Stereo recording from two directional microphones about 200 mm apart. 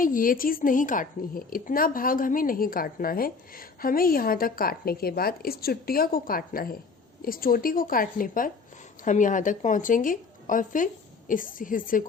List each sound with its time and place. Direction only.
0.0 s a woman's voice: 45° left (ahead or behind)